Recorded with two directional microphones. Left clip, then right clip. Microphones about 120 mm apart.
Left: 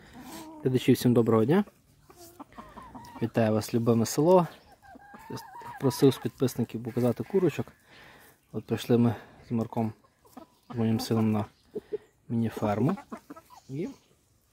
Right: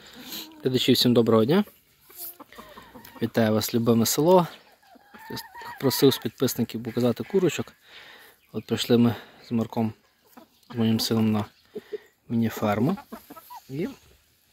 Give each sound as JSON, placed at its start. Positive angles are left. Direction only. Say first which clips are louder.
{"t": 0.0, "sound": "speech", "louder": "right 5 dB", "side_deg": 25}
{"t": 2.5, "sound": "chicken", "louder": "right 1 dB", "side_deg": 15}
{"t": 3.2, "sound": "speech", "louder": "right 3 dB", "side_deg": 20}